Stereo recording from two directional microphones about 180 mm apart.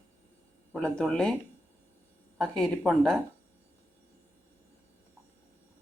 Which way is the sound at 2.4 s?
Centre (ahead or behind).